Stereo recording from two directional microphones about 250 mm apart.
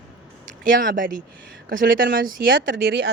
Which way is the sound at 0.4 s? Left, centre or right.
Right.